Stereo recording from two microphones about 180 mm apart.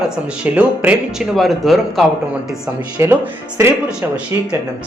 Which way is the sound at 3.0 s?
15° right (ahead or behind).